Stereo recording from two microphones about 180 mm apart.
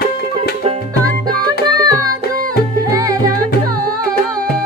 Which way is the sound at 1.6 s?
20° right (ahead or behind).